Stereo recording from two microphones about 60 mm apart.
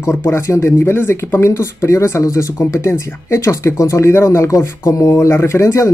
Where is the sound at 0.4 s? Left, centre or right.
Left.